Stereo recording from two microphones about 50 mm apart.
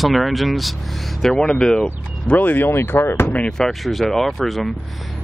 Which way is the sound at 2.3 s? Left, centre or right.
Left.